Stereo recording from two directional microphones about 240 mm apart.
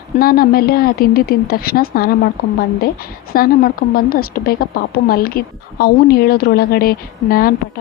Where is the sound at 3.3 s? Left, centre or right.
Left.